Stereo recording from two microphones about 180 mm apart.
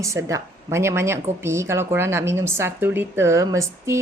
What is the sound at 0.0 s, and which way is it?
A woman's voice, 15° right (ahead or behind).